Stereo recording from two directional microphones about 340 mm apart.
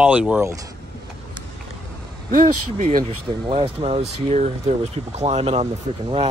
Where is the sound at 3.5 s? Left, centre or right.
Centre.